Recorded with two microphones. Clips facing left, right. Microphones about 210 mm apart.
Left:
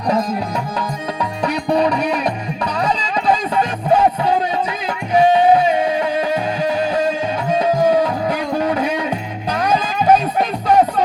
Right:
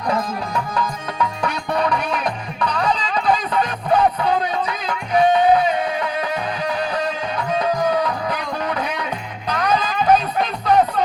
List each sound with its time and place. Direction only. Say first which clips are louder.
1.2 s music: left 2 dB; 35° left (ahead or behind)
3.2 s music: left 2 dB; 25° left (ahead or behind)